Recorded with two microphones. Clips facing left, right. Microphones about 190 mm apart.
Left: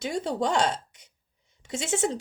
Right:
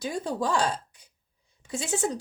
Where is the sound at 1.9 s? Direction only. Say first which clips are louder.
Left 2 dB; 25° left (ahead or behind).